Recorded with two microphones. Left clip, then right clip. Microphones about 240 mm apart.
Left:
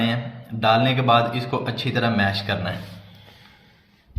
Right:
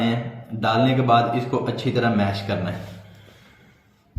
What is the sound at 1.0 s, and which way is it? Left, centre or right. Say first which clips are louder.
A man's voice: even; left.